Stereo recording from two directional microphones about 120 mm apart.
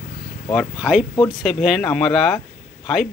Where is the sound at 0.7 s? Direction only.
10° right (ahead or behind).